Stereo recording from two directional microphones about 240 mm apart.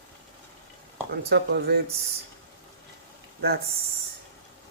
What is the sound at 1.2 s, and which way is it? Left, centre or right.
Speech, right.